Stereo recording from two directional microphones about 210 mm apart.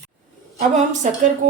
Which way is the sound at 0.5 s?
35° right (ahead or behind).